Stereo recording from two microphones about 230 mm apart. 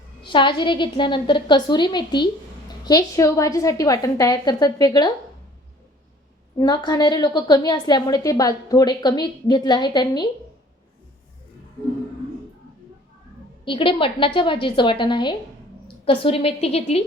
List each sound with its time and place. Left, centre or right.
0.2 s a woman's voice: left
6.6 s a woman's voice: centre
13.7 s a woman's voice: left